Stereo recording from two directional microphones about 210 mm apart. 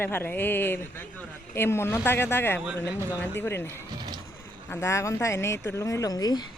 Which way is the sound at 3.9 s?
20° right (ahead or behind).